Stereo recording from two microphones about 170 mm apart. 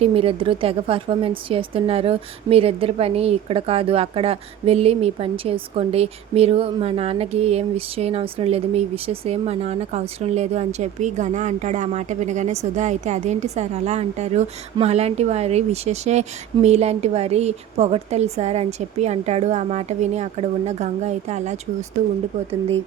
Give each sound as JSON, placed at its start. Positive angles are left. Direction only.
{"t": 0.0, "sound": "speech", "side_deg": -35}